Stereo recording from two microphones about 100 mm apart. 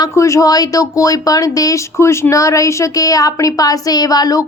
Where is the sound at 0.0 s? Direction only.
30° left (ahead or behind).